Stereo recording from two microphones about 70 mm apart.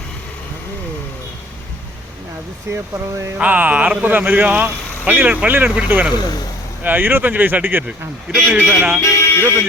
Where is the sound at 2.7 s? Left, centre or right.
Right.